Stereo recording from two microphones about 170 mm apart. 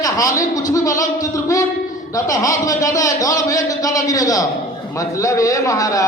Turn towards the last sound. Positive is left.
turn(degrees=20)  # may be behind; listen again after turning